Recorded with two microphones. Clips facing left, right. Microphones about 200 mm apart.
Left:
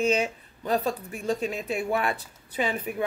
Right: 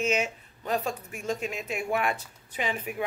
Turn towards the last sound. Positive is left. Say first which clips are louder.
# left 3 dB
turn(degrees=35)  # may be behind; listen again after turning